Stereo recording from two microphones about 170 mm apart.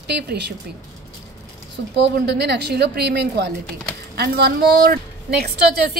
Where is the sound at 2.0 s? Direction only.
85° right.